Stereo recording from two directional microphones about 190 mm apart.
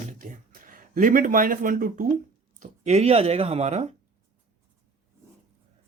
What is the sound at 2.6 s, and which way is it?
Speech, 35° right (ahead or behind).